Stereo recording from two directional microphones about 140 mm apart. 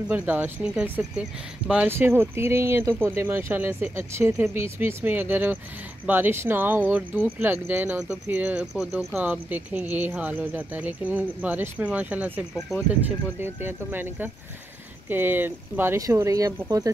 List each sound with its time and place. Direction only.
0.1 s speech: 15° right (ahead or behind)